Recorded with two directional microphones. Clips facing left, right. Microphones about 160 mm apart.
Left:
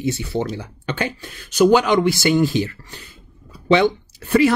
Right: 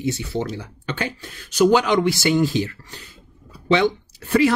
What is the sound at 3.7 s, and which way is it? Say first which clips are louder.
Speech: left 3 dB; 10° left (ahead or behind).